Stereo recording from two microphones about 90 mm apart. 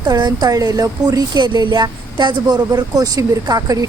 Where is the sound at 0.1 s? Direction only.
55° right (ahead or behind).